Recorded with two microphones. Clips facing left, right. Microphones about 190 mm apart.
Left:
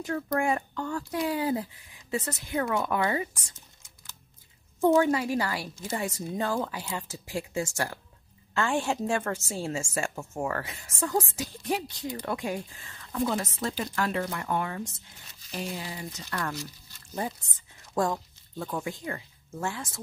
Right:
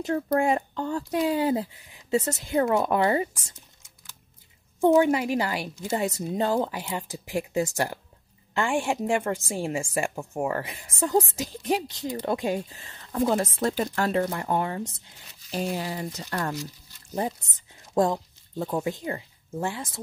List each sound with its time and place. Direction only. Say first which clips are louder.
0.0 s a woman's voice: right 4 dB; 25° right (ahead or behind)
4.7 s a woman's voice: right 3 dB; 15° right (ahead or behind)
13.3 s speech: right 6 dB; 40° right (ahead or behind)
15.7 s speech: right 6 dB; 55° right (ahead or behind)
17.9 s speech: right 5 dB; 20° right (ahead or behind)